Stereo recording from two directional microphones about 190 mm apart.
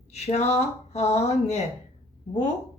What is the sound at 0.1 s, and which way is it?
A woman's voice, 35° left (ahead or behind).